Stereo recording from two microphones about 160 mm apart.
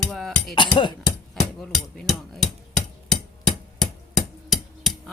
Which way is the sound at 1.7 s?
Centre (ahead or behind).